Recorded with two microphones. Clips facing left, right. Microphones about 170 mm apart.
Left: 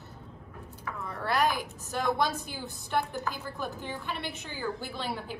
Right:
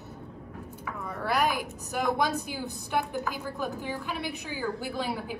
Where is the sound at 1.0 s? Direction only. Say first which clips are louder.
Right 1 dB; centre (ahead or behind).